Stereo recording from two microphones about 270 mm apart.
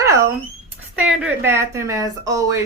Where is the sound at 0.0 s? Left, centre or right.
Centre.